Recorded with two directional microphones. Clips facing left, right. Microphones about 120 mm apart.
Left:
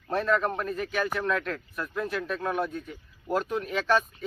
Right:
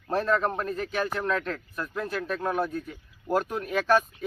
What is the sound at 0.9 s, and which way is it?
Speech, 30° right (ahead or behind).